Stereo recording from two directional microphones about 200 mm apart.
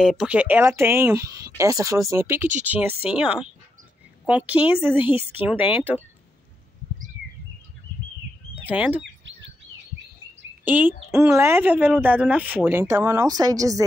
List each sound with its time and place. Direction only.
0.0 s speech: centre (ahead or behind)
8.6 s speech: 10° right (ahead or behind)
9.0 s bird vocalization: 65° right (ahead or behind)
10.6 s speech: 10° right (ahead or behind)